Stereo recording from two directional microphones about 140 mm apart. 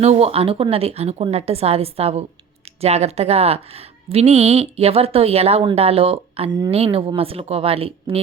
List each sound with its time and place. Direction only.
0.0 s a woman's voice: 50° right (ahead or behind)